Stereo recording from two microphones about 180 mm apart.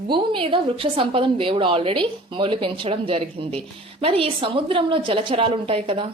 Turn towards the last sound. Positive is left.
turn(degrees=-30)  # may be behind; listen again after turning